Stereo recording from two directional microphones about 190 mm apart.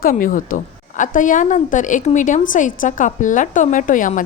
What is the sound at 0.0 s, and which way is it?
A woman's voice, 45° left (ahead or behind).